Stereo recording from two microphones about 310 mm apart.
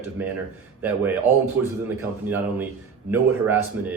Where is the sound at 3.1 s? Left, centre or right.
Centre.